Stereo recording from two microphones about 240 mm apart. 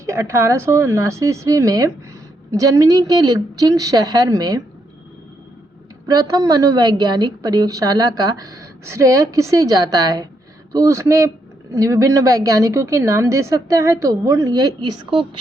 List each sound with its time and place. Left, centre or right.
0.0 s a woman's voice: centre
6.1 s a woman's voice: centre